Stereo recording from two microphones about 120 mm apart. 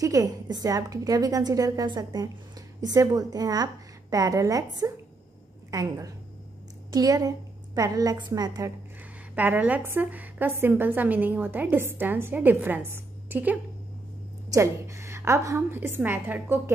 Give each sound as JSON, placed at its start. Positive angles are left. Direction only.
{"t": 0.0, "sound": "a woman's voice", "side_deg": -30}
{"t": 9.3, "sound": "a woman's voice", "side_deg": -10}